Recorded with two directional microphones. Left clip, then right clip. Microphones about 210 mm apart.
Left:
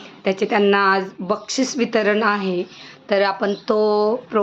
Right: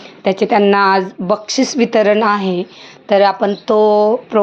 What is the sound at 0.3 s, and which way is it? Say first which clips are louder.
A woman's voice: right 5 dB; 25° right (ahead or behind).